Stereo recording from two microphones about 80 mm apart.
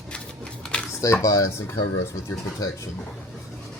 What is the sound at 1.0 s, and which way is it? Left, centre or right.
Speech, left.